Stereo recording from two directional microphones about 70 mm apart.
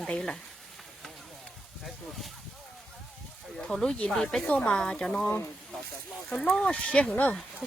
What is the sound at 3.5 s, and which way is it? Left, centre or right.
Speech, centre.